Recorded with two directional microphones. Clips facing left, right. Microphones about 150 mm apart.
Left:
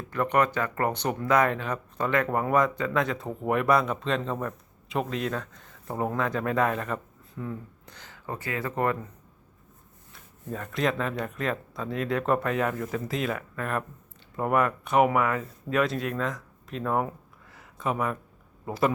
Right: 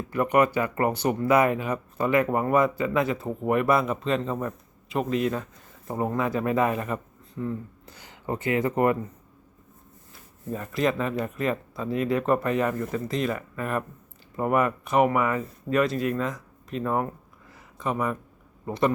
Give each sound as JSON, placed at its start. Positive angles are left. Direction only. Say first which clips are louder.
{"t": 0.1, "sound": "speech", "louder": "right 3 dB", "side_deg": -10}
{"t": 8.1, "sound": "speech", "louder": "right 7 dB", "side_deg": -20}
{"t": 10.5, "sound": "speech", "louder": "right 2 dB", "side_deg": -5}